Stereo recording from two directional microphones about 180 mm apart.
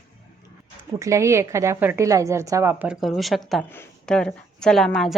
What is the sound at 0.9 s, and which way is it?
A woman's voice, 15° right (ahead or behind).